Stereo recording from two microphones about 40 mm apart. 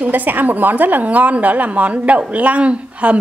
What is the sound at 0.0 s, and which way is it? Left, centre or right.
A woman's voice, right.